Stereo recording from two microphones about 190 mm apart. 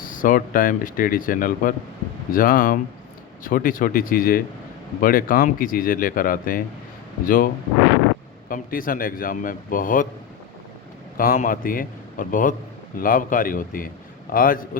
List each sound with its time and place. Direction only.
0.0 s a man's voice: 45° left (ahead or behind)
11.2 s a man's voice: 50° left (ahead or behind)